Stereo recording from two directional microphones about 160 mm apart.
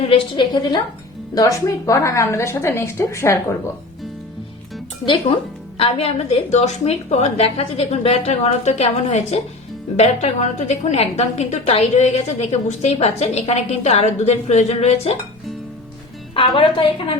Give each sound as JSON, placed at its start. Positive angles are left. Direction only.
{"t": 0.0, "sound": "a woman's voice", "side_deg": 35}
{"t": 5.0, "sound": "a woman's voice", "side_deg": 35}
{"t": 16.6, "sound": "a woman's voice", "side_deg": 30}